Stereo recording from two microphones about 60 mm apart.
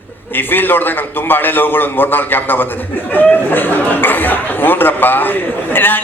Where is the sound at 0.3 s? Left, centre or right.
Left.